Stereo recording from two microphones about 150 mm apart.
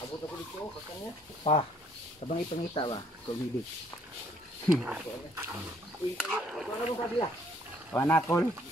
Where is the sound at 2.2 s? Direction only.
45° left (ahead or behind).